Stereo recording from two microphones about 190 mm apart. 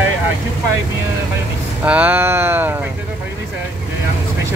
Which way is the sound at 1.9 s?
10° right (ahead or behind).